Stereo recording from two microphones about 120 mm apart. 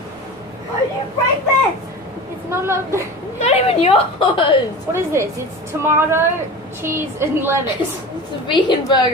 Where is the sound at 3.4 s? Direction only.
60° left (ahead or behind).